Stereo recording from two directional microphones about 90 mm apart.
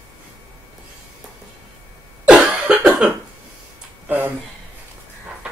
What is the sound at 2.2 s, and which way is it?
Cough, 15° right (ahead or behind).